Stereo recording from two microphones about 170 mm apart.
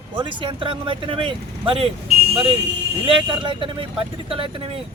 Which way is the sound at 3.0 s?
30° right (ahead or behind).